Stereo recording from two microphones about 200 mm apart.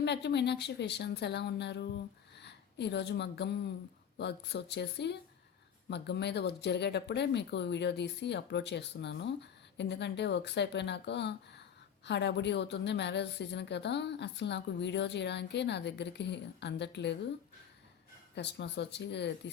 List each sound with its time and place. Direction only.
0.0 s speech: 60° left (ahead or behind)
18.3 s speech: 60° left (ahead or behind)